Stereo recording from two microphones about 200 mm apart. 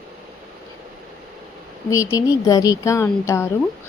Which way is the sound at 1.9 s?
15° left (ahead or behind).